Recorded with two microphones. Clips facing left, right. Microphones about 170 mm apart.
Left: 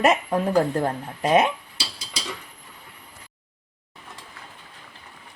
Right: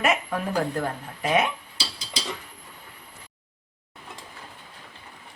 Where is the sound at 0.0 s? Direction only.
30° left (ahead or behind).